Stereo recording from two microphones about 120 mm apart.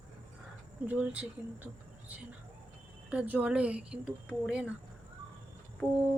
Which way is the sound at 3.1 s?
10° right (ahead or behind).